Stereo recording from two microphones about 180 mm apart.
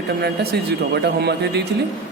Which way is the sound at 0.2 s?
65° right (ahead or behind).